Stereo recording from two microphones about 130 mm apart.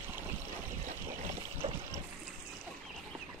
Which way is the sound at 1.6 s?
55° right (ahead or behind).